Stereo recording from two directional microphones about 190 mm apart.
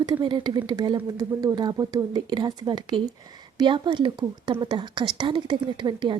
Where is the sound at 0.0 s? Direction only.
20° right (ahead or behind).